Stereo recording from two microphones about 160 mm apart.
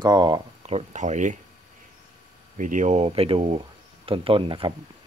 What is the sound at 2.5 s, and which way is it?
Speech, 50° right (ahead or behind).